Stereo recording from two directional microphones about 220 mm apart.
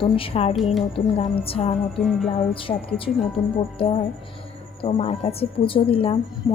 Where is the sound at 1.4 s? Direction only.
30° left (ahead or behind).